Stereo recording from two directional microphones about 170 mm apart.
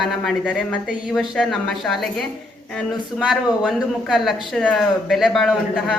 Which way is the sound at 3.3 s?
Centre (ahead or behind).